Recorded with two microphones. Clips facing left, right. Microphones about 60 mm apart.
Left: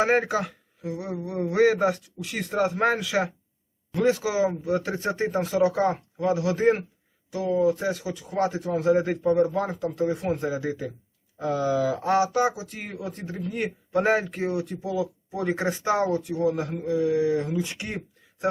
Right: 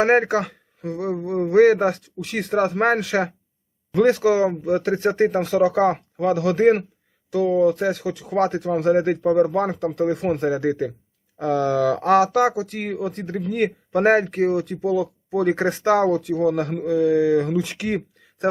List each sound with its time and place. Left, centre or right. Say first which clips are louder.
0.0 s speech: right 5 dB; right
1.3 s speech: right 6 dB; right
2.1 s speech: right 5 dB; right
7.3 s speech: right 5 dB; right
13.9 s speech: right 5 dB; right